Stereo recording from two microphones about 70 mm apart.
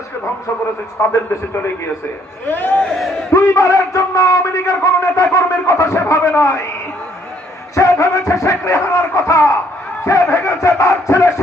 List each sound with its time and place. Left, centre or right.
1.0 s a man's voice: left
2.5 s speech: left
2.9 s crowd: centre
3.3 s a man's voice: left
7.8 s a man's voice: left